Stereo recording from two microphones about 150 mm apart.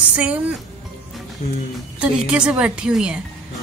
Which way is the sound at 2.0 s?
5° right (ahead or behind).